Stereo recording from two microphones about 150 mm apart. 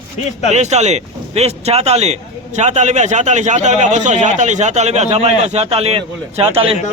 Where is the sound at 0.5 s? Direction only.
50° right (ahead or behind).